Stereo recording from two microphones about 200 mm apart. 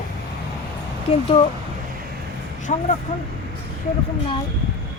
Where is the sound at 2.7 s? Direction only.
40° left (ahead or behind).